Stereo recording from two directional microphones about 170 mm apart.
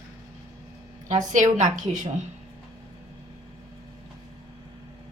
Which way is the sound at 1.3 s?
45° right (ahead or behind).